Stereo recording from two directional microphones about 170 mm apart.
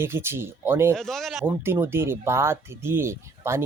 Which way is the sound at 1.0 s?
Centre (ahead or behind).